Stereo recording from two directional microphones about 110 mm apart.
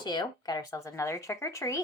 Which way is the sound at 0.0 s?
45° left (ahead or behind).